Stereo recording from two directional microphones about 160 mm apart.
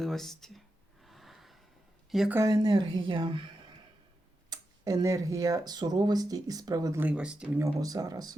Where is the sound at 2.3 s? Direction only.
20° right (ahead or behind).